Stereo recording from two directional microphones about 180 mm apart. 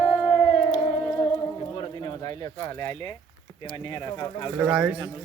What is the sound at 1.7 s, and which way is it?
Bird, 25° left (ahead or behind).